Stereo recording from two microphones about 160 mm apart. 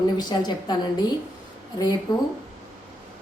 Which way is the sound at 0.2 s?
25° left (ahead or behind).